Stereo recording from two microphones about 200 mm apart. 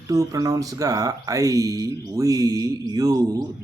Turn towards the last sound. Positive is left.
turn(degrees=-15)  # may be behind; listen again after turning